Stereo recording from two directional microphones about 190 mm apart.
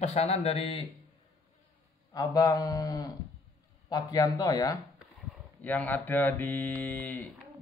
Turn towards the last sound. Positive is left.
turn(degrees=10)  # may be behind; listen again after turning